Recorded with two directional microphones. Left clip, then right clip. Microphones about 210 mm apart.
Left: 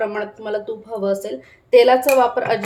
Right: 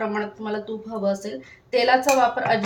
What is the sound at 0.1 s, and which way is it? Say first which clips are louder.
Speech: left 3 dB; 45° left (ahead or behind).